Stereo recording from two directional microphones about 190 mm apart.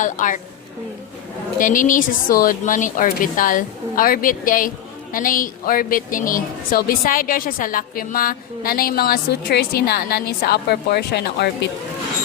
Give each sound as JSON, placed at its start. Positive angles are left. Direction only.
{"t": 0.0, "sound": "a woman's voice", "side_deg": 40}
{"t": 1.5, "sound": "a woman's voice", "side_deg": 45}